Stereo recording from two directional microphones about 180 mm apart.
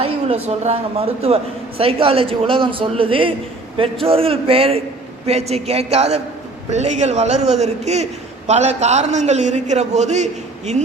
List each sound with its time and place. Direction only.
0.4 s a man's voice: 35° right (ahead or behind)